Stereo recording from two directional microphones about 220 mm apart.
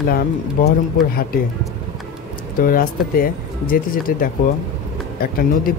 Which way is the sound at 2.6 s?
40° left (ahead or behind).